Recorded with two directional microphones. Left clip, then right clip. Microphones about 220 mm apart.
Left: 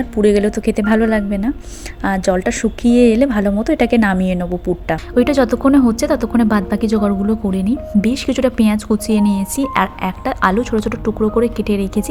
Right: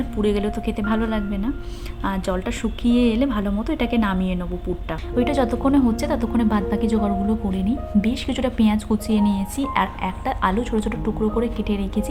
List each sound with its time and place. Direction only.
0.2 s speech: 20° left (ahead or behind)